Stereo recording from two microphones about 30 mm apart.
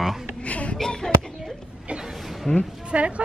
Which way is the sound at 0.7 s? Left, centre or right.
Centre.